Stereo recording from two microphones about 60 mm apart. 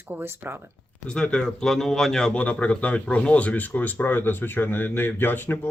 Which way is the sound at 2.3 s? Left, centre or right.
Left.